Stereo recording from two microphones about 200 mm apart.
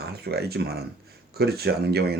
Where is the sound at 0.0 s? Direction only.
50° right (ahead or behind).